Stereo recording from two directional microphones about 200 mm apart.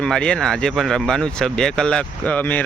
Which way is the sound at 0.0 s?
5° left (ahead or behind).